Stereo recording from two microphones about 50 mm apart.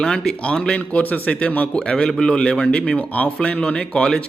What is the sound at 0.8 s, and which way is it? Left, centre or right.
A man's voice, left.